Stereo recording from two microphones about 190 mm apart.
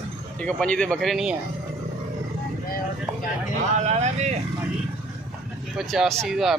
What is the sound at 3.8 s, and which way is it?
Speech, 35° right (ahead or behind).